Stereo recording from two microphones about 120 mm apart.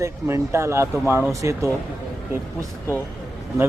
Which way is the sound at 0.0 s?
25° right (ahead or behind).